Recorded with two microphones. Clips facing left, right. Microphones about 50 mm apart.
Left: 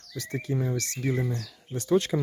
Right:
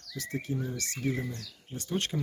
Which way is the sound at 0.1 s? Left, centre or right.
Left.